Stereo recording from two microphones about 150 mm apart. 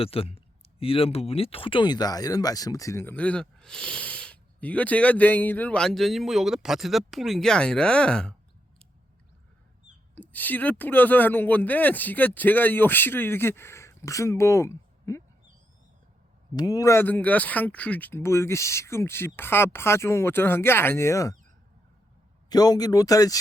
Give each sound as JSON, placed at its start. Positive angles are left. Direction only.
{"t": 0.0, "sound": "speech", "side_deg": 40}
{"t": 10.2, "sound": "speech", "side_deg": 10}
{"t": 16.6, "sound": "speech", "side_deg": 25}
{"t": 22.4, "sound": "speech", "side_deg": 25}